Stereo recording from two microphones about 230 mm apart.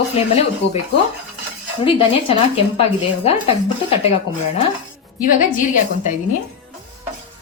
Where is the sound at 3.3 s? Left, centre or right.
Left.